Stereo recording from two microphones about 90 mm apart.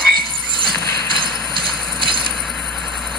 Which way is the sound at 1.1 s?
65° right (ahead or behind).